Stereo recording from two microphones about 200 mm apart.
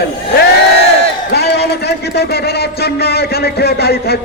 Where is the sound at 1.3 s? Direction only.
55° left (ahead or behind).